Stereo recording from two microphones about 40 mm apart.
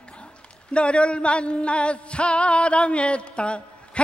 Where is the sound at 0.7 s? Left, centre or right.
Left.